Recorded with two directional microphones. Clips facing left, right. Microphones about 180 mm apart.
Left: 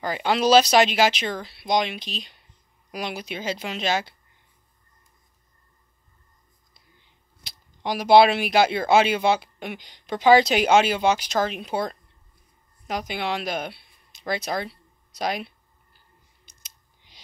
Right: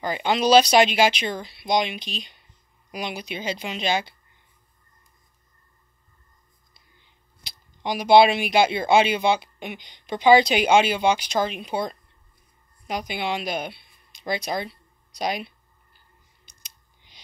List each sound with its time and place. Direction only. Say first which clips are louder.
0.1 s speech: even; centre (ahead or behind)
7.8 s speech: even; centre (ahead or behind)